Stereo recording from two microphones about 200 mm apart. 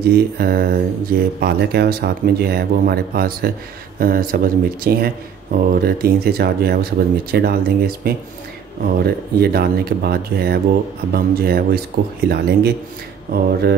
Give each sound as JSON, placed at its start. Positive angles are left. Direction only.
{"t": 0.0, "sound": "speech", "side_deg": -50}